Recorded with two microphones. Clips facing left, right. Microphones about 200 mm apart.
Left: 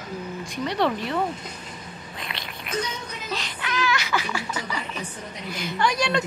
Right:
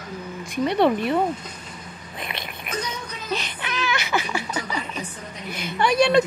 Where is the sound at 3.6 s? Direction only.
25° right (ahead or behind).